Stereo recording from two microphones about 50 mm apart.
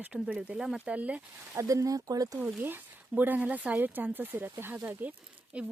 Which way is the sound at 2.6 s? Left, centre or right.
Right.